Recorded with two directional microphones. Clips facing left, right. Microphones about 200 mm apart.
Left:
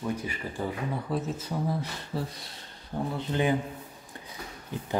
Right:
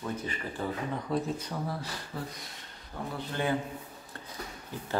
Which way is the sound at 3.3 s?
15° left (ahead or behind).